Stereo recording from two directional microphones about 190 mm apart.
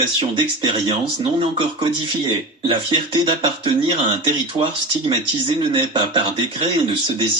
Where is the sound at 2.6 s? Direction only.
25° right (ahead or behind).